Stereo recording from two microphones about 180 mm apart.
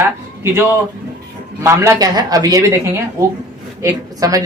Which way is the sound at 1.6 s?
15° right (ahead or behind).